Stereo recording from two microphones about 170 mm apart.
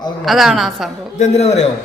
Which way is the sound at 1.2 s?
40° left (ahead or behind).